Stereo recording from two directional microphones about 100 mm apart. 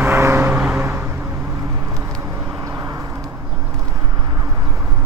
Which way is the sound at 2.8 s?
35° right (ahead or behind).